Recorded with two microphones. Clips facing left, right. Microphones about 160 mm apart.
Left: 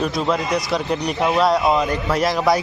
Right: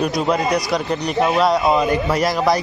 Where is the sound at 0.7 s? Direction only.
Centre (ahead or behind).